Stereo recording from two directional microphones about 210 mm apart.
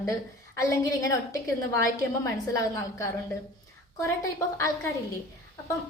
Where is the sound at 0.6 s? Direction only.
15° left (ahead or behind).